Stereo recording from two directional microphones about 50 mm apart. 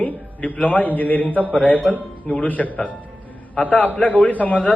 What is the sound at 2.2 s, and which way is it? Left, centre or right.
Speech, left.